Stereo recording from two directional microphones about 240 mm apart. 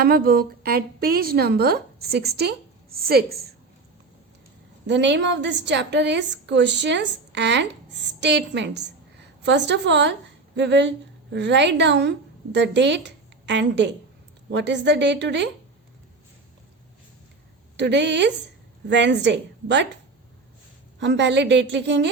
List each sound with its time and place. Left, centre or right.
0.0 s a woman's voice: right
4.9 s a woman's voice: right
17.7 s a woman's voice: right
21.0 s a woman's voice: right